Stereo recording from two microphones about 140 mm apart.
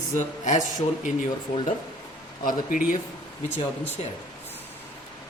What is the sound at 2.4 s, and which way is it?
Speech, 80° left.